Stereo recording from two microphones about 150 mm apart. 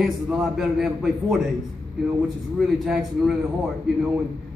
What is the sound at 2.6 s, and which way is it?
Speech, centre (ahead or behind).